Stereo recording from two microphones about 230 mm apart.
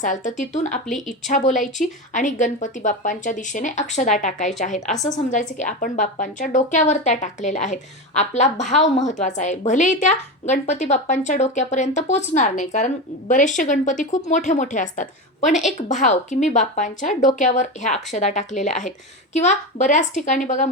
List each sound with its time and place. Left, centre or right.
0.0 s a woman's voice: left